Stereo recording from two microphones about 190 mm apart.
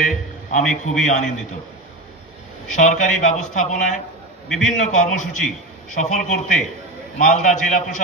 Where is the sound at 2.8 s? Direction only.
40° left (ahead or behind).